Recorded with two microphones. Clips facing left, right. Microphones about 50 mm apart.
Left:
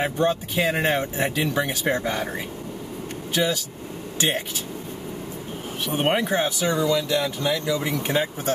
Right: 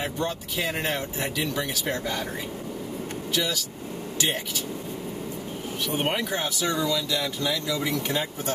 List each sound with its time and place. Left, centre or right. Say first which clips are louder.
0.0 s speech: left 7 dB; left
3.3 s speech: left 5 dB; left
6.0 s speech: left 9 dB; left